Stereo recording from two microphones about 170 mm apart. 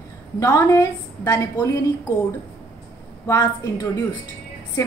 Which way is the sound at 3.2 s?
20° left (ahead or behind).